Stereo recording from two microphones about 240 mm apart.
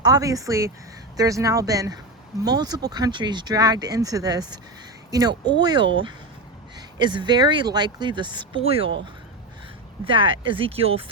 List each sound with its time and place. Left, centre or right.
0.0 s speech: centre
10.0 s speech: right